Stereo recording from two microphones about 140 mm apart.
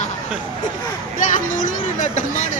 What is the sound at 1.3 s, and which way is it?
Speech, 70° left (ahead or behind).